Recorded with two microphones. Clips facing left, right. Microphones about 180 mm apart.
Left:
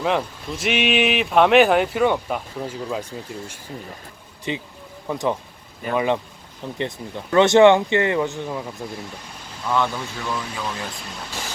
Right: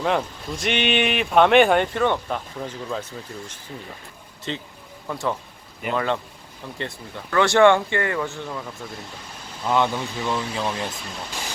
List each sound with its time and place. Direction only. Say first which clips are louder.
0.0 s speech: left 1 dB; centre (ahead or behind)
9.6 s speech: right 1 dB; 20° right (ahead or behind)